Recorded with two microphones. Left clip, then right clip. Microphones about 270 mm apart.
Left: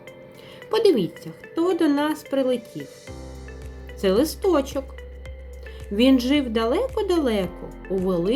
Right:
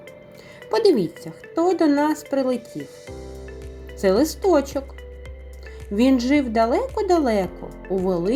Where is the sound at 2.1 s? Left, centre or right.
Centre.